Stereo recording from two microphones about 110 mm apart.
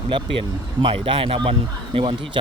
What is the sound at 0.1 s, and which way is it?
Speech, 50° right (ahead or behind).